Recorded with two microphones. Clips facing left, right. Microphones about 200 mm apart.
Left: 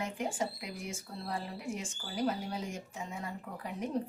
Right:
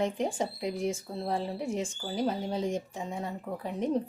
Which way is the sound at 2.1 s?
25° right (ahead or behind).